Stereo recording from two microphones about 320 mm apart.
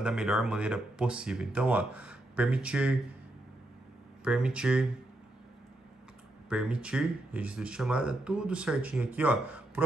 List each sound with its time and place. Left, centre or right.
0.0 s speech: centre
4.2 s speech: centre
6.5 s speech: centre